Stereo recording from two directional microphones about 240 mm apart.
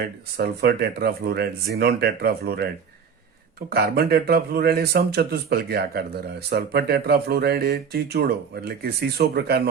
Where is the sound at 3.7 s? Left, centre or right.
Right.